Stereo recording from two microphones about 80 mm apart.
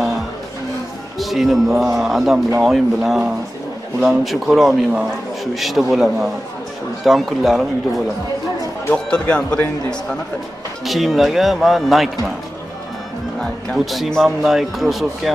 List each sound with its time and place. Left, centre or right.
1.1 s speech: centre
8.9 s speech: centre
13.7 s speech: centre